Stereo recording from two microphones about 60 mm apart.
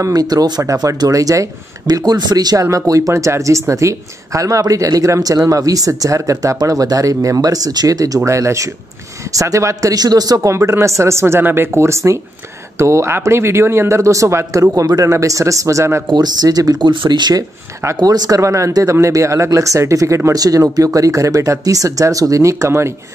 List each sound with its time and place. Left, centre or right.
0.0 s speech: right
0.8 s speech: right
2.0 s speech: right
8.3 s speech: right
9.3 s speech: right
10.5 s speech: right
14.8 s speech: right
16.3 s speech: right
17.0 s speech: right
18.0 s speech: right
18.9 s speech: right
20.3 s speech: right
20.7 s speech: right